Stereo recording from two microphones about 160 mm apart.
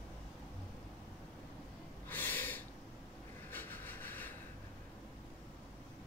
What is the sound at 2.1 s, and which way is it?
Snort, 10° left (ahead or behind).